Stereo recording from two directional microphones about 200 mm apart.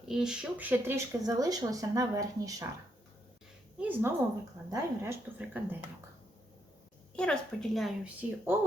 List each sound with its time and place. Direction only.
0.1 s speech: 5° right (ahead or behind)
3.8 s a woman's voice: 10° right (ahead or behind)
7.2 s a woman's voice: centre (ahead or behind)